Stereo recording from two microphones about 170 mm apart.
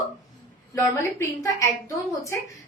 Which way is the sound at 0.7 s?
20° left (ahead or behind).